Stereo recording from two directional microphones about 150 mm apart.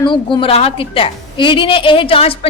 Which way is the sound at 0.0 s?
35° left (ahead or behind).